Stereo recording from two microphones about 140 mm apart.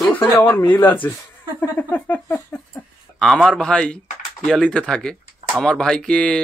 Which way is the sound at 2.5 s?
10° left (ahead or behind).